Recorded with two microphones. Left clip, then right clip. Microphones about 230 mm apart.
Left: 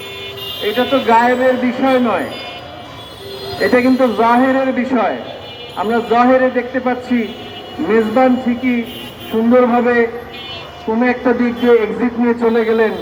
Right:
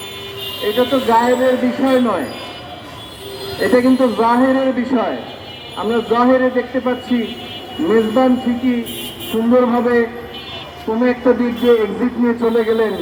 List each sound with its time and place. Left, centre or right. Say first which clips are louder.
0.6 s speech: left 1 dB; left
3.6 s speech: left 1 dB; left